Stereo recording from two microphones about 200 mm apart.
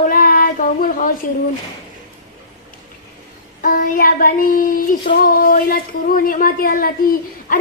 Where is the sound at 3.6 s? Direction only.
45° left (ahead or behind).